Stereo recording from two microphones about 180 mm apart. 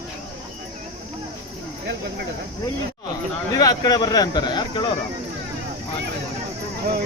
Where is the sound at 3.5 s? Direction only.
20° left (ahead or behind).